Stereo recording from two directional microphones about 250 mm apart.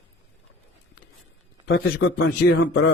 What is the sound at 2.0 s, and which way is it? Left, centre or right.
Speech, left.